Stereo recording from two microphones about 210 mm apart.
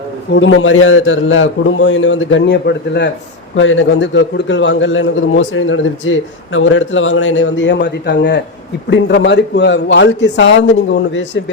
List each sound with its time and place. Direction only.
0.3 s a man's voice: 65° left (ahead or behind)
3.5 s a man's voice: 65° left (ahead or behind)